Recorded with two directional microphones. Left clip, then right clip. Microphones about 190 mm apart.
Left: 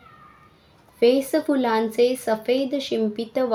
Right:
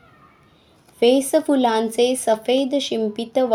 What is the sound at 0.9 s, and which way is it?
A woman's voice, 15° right (ahead or behind).